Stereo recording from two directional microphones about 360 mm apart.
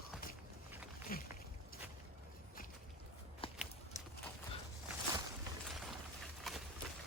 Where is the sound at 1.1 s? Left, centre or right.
Left.